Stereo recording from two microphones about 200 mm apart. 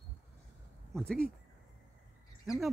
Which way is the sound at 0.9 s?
5° left (ahead or behind).